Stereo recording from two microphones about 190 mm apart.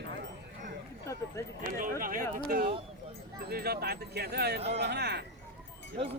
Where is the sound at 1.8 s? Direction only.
45° right (ahead or behind).